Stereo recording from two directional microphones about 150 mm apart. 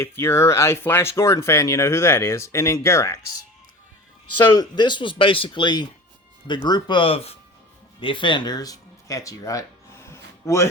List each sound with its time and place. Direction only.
0.0 s speech: 15° left (ahead or behind)
4.5 s speech: 30° left (ahead or behind)